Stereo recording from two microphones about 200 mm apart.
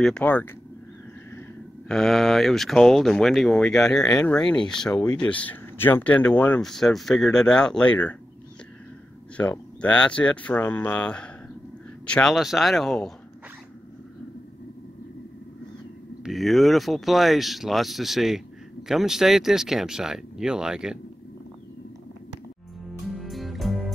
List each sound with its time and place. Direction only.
0.0 s speech: 5° left (ahead or behind)
1.9 s speech: centre (ahead or behind)
9.4 s speech: 5° left (ahead or behind)
16.3 s speech: centre (ahead or behind)
23.1 s music: centre (ahead or behind)